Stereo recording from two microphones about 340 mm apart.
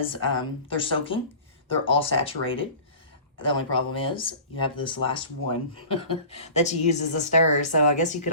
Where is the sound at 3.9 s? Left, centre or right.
Centre.